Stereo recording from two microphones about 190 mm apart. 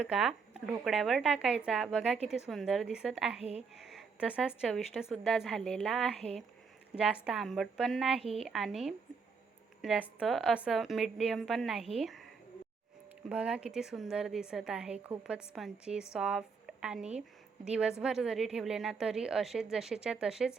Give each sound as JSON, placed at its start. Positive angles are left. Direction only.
{"t": 0.1, "sound": "speech", "side_deg": 0}
{"t": 8.2, "sound": "speech", "side_deg": -30}
{"t": 8.4, "sound": "a woman's voice", "side_deg": 0}